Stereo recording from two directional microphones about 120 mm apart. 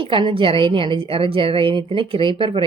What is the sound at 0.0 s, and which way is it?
A woman's voice, 45° right (ahead or behind).